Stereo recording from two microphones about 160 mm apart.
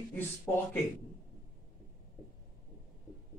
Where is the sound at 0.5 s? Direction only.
15° left (ahead or behind).